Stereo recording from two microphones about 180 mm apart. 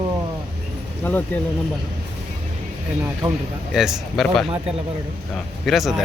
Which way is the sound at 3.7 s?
Centre (ahead or behind).